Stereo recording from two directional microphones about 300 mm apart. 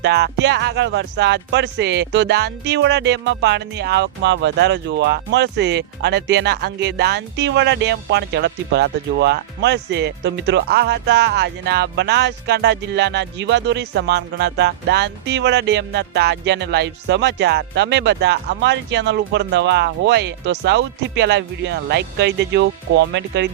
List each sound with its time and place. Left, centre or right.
0.0 s speech: right